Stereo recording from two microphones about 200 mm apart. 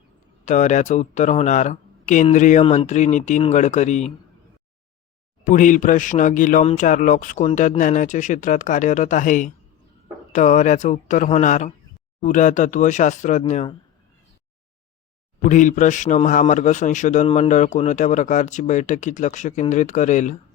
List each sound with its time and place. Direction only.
0.4 s speech: 35° left (ahead or behind)
5.5 s speech: 40° left (ahead or behind)
15.4 s speech: 40° left (ahead or behind)